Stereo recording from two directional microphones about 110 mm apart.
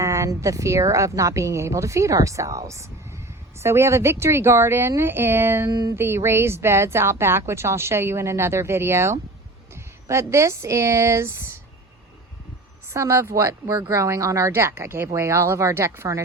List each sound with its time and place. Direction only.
0.0 s speech: 30° right (ahead or behind)
5.7 s a sound: 35° right (ahead or behind)
6.0 s speech: 20° right (ahead or behind)
12.9 s speech: 25° right (ahead or behind)